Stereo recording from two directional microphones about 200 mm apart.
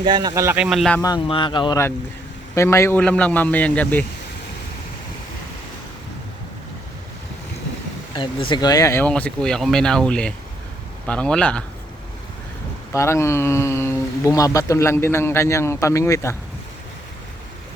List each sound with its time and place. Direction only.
0.0 s speech: 20° right (ahead or behind); by 1.0 s centre (ahead or behind)
1.0 s speech: 20° left (ahead or behind)
8.1 s a man's voice: 25° left (ahead or behind); by 11.6 s 5° left (ahead or behind)
12.9 s speech: 15° left (ahead or behind)